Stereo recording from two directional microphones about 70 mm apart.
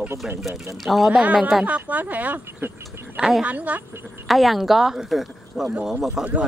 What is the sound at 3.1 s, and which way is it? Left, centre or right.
Speech, centre.